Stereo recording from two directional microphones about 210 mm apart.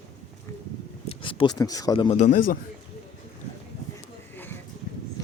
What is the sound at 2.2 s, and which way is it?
Speech, 40° left (ahead or behind).